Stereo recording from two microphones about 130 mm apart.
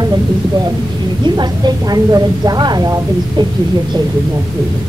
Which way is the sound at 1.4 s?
30° right (ahead or behind).